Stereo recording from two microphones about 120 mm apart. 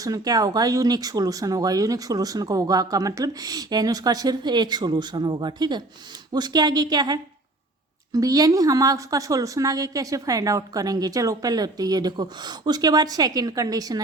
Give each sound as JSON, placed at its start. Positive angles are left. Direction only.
{"t": 0.0, "sound": "a woman's voice", "side_deg": -30}